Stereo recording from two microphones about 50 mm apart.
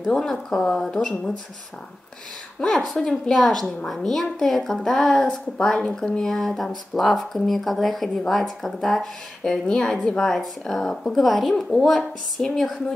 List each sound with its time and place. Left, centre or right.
0.1 s a woman's voice: centre
2.6 s a woman's voice: centre